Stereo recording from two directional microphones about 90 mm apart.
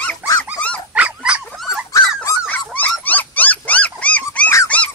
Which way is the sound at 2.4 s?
20° left (ahead or behind).